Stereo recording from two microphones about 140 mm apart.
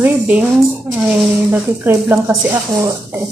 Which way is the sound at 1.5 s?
15° right (ahead or behind).